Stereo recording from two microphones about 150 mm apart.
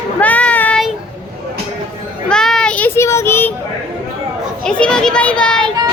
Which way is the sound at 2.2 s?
5° left (ahead or behind).